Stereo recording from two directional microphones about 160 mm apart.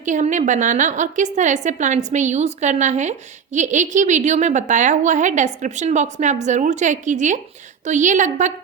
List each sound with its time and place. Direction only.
0.0 s a woman's voice: 50° right (ahead or behind)